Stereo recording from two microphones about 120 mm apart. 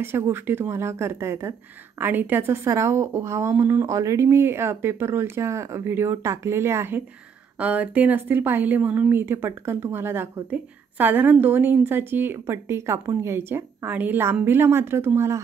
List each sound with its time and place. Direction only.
0.0 s a woman's voice: 20° right (ahead or behind)